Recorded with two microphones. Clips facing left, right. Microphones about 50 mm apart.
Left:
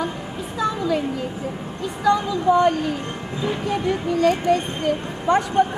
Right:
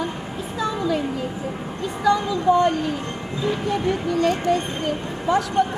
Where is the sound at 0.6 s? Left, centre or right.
Centre.